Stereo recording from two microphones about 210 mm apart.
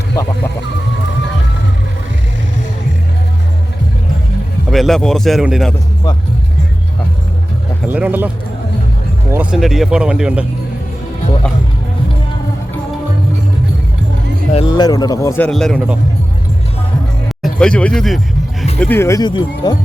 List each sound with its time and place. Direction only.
4.7 s speech: centre (ahead or behind)
7.9 s speech: 10° right (ahead or behind)
9.3 s speech: 5° right (ahead or behind)
14.5 s speech: 20° left (ahead or behind); by 16.0 s centre (ahead or behind)
17.2 s music: centre (ahead or behind)
18.8 s speech: 10° left (ahead or behind)